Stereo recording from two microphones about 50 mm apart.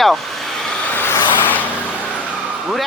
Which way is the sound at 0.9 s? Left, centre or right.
Left.